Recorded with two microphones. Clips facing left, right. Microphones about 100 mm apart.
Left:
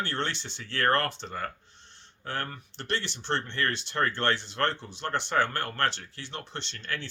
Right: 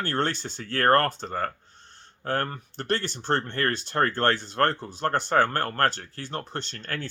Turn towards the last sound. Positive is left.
turn(degrees=-45)  # may be behind; listen again after turning